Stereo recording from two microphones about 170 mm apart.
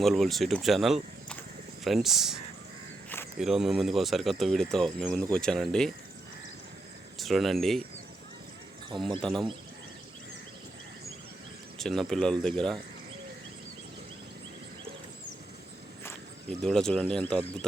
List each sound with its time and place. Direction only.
0.0 s speech: centre (ahead or behind)
7.2 s speech: centre (ahead or behind)
8.9 s speech: 30° right (ahead or behind)
11.8 s speech: centre (ahead or behind)
16.6 s speech: 5° left (ahead or behind)